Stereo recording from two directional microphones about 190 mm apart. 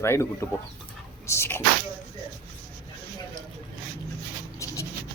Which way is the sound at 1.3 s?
15° left (ahead or behind).